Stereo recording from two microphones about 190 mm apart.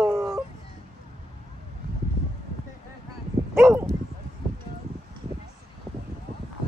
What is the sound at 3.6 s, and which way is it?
Bow-wow, 15° right (ahead or behind).